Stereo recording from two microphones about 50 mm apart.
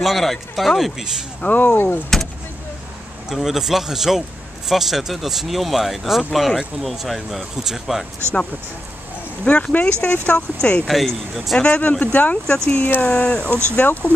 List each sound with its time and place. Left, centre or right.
0.0 s speech: centre
1.4 s speech: left
2.1 s vehicle: centre
3.3 s speech: centre
9.4 s speech: left
10.9 s speech: centre
11.6 s speech: left
12.4 s speech: centre
12.7 s speech: left
13.1 s speech: left
13.7 s speech: left